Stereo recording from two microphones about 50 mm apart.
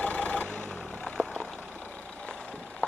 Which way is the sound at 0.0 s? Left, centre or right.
Left.